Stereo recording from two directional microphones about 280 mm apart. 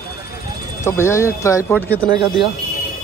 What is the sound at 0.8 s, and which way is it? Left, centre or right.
Speech, centre.